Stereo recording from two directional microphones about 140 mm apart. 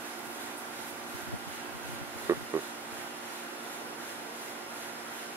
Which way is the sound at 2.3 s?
20° right (ahead or behind).